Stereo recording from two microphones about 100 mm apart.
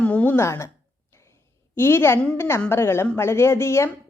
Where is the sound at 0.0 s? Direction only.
15° left (ahead or behind).